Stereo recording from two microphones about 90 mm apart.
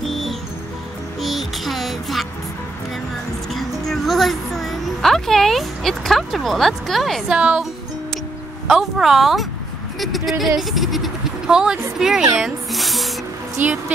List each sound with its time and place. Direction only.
0.0 s music: centre (ahead or behind)
1.2 s child singing: centre (ahead or behind)
3.5 s music: 5° left (ahead or behind)
7.3 s speech: 10° right (ahead or behind)
8.6 s speech: 5° right (ahead or behind)
12.4 s snake: centre (ahead or behind)
13.6 s speech: 20° right (ahead or behind)